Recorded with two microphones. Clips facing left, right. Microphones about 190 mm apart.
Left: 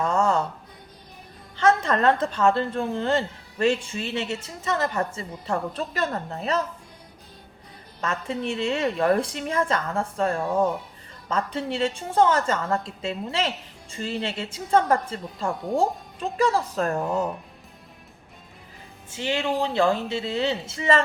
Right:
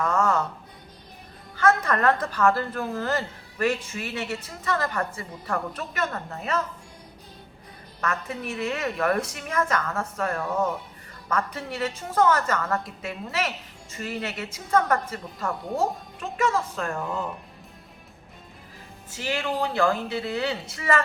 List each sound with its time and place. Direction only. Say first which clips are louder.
0.0 s music: left 1 dB; 30° left (ahead or behind)
1.5 s a woman's voice: left 1 dB; 25° left (ahead or behind)
8.0 s a woman's voice: left 2 dB; 25° left (ahead or behind)
19.1 s a woman's voice: left 3 dB; 25° left (ahead or behind)